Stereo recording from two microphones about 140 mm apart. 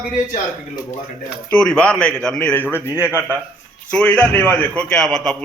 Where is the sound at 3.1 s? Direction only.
15° right (ahead or behind).